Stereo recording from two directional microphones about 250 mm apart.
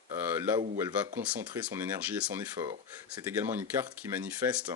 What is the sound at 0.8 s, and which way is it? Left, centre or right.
Speech, centre.